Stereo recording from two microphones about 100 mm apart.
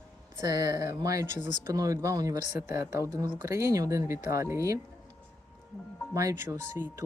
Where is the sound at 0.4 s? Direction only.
40° right (ahead or behind).